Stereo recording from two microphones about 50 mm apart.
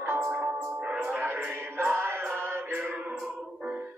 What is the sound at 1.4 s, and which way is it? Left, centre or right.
Music, right.